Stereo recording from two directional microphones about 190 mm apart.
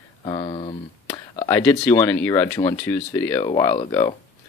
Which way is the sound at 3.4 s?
25° left (ahead or behind).